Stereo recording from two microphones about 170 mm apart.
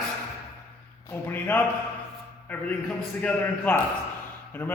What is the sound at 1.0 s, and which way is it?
Speech, 10° left (ahead or behind).